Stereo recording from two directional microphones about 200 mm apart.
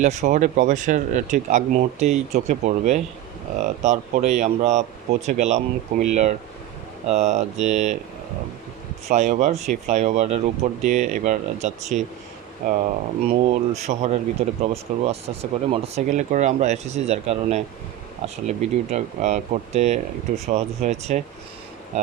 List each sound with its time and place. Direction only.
0.0 s speech: 35° right (ahead or behind)
9.0 s speech: 35° right (ahead or behind)
13.2 s speech: 35° right (ahead or behind)